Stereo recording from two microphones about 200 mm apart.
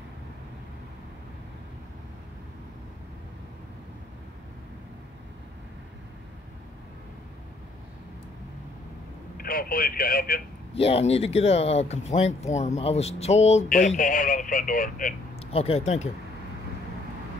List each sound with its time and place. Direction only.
9.4 s speech: 45° left (ahead or behind)
10.7 s speech: 30° left (ahead or behind)
15.3 s speech: 30° left (ahead or behind)